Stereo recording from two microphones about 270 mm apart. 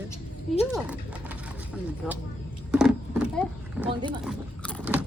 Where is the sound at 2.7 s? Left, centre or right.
Centre.